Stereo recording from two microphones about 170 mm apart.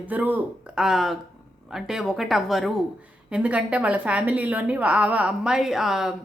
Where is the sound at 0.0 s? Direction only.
10° right (ahead or behind).